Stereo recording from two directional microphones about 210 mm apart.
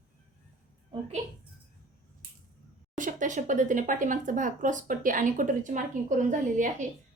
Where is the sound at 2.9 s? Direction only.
40° right (ahead or behind).